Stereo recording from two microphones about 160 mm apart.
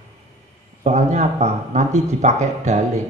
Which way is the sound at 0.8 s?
45° right (ahead or behind).